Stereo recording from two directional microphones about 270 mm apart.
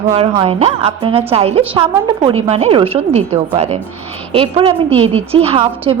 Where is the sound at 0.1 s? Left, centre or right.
Right.